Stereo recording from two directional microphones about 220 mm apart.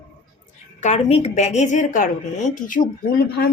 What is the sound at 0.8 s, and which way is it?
Speech, 30° left (ahead or behind).